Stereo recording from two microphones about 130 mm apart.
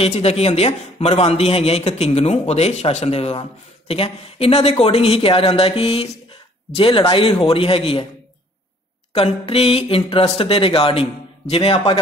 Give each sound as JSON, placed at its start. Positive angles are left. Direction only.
{"t": 0.0, "sound": "a man's voice", "side_deg": 50}
{"t": 9.1, "sound": "a man's voice", "side_deg": 45}